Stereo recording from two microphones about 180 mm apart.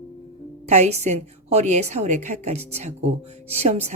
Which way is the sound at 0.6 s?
40° right (ahead or behind).